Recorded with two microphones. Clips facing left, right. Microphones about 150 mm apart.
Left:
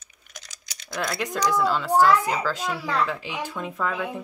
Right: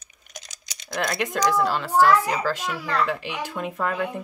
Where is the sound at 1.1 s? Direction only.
Centre (ahead or behind).